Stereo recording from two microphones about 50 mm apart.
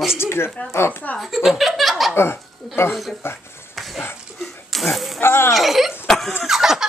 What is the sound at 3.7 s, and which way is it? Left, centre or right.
Dog, centre.